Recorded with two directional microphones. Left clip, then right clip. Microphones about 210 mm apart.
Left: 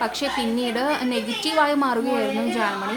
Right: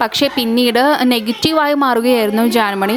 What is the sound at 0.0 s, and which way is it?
A woman's voice, 40° right (ahead or behind).